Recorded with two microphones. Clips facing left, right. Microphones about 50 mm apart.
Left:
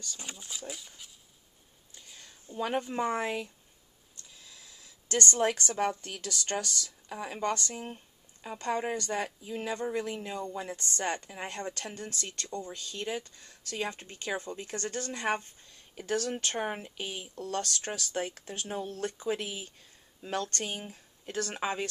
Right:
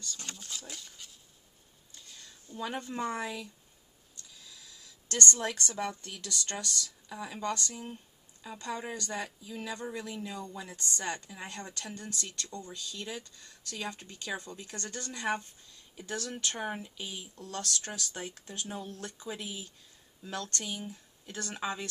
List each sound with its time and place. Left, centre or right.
0.2 s speech: centre
2.0 s a sound: centre
3.2 s speech: left
4.5 s speech: left